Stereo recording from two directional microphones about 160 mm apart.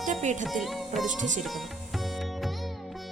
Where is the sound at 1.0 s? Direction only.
50° right (ahead or behind).